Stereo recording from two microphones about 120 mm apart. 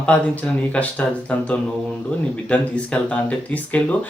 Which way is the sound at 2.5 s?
10° left (ahead or behind).